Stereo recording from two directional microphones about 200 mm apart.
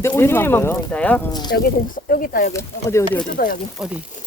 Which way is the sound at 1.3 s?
20° left (ahead or behind).